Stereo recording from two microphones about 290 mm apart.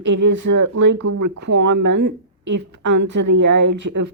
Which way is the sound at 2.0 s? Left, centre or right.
Right.